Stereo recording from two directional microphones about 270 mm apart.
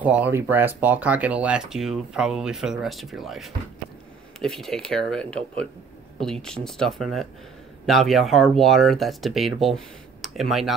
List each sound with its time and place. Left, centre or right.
0.0 s speech: centre
6.4 s speech: centre